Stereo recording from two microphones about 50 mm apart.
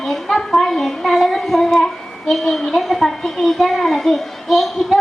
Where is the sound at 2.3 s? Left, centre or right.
Centre.